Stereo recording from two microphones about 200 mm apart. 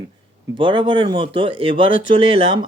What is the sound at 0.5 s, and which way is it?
Speech, 25° right (ahead or behind).